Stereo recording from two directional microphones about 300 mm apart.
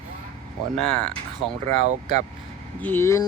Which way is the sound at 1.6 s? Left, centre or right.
Right.